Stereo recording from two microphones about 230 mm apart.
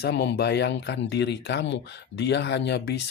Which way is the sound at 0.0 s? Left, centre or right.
Left.